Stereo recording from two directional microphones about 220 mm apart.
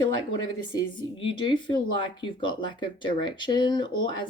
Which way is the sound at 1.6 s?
20° left (ahead or behind).